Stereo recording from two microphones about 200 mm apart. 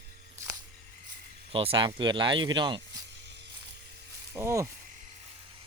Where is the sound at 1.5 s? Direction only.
25° right (ahead or behind).